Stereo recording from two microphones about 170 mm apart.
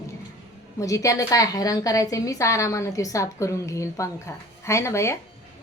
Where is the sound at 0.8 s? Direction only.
20° left (ahead or behind).